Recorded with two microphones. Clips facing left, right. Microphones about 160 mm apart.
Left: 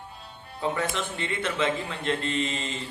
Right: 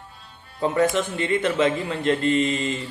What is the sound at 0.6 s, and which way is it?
A man's voice, 40° right (ahead or behind).